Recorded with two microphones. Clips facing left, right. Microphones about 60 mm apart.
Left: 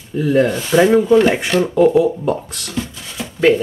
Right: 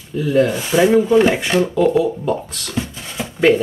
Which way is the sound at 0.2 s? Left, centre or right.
Centre.